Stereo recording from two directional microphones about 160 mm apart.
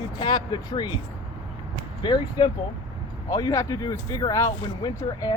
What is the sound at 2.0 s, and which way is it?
Speech, 30° left (ahead or behind).